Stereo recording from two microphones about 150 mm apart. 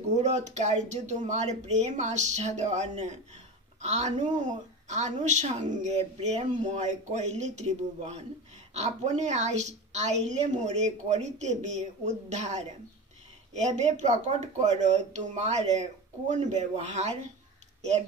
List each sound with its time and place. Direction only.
0.1 s a woman's voice: 50° right (ahead or behind)